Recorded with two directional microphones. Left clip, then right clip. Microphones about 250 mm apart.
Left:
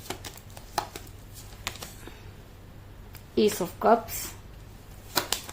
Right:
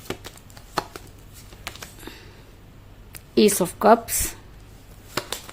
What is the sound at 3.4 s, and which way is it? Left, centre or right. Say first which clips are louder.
Speech: right 6 dB; right.